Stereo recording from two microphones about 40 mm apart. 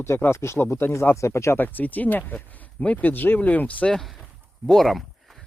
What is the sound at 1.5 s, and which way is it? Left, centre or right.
Speech, left.